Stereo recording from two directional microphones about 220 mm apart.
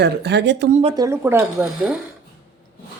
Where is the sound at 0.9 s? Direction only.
15° right (ahead or behind).